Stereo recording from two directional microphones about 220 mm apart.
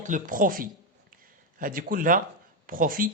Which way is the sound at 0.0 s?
35° right (ahead or behind).